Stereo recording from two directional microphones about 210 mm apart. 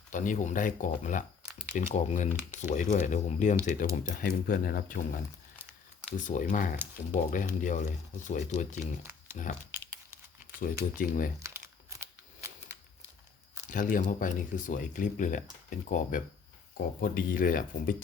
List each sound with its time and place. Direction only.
0.1 s speech: 35° left (ahead or behind)
10.6 s speech: 40° left (ahead or behind)
11.4 s a sound: 15° right (ahead or behind)
13.7 s speech: 40° left (ahead or behind)